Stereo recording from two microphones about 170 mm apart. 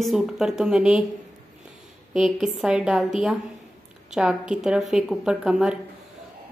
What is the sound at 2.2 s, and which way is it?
A woman's voice, 5° right (ahead or behind).